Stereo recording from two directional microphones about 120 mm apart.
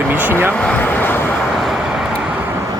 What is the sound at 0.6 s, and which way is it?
Vehicle, 10° left (ahead or behind).